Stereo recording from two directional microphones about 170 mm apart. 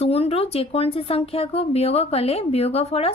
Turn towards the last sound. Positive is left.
turn(degrees=35)  # may be behind; listen again after turning